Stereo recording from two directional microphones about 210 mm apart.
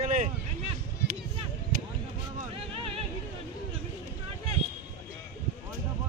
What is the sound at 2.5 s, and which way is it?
Music, 30° right (ahead or behind).